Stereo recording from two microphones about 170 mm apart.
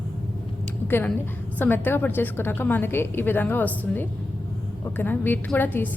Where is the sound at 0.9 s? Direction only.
15° left (ahead or behind).